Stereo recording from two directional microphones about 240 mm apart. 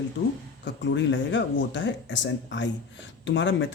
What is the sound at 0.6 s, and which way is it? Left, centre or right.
Speech, left.